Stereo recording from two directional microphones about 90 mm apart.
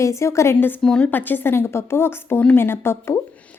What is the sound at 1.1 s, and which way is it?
Speech, 20° left (ahead or behind).